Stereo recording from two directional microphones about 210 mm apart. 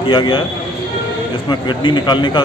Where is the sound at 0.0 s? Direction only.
25° left (ahead or behind).